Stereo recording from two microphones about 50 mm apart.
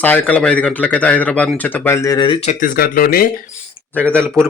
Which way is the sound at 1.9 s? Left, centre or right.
Left.